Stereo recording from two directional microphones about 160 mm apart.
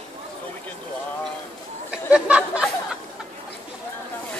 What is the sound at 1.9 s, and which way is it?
Speech, 5° right (ahead or behind).